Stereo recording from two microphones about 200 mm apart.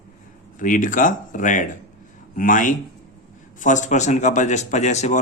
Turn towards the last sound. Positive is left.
turn(degrees=35)  # may be behind; listen again after turning